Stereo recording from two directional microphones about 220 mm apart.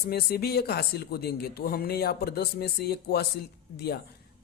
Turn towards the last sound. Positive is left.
turn(degrees=45)  # may be behind; listen again after turning